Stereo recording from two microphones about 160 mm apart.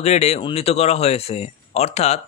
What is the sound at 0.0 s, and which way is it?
Speech, 40° left (ahead or behind).